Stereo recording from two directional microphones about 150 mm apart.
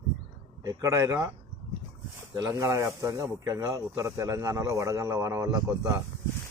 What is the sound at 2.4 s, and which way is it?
Speech, 20° right (ahead or behind).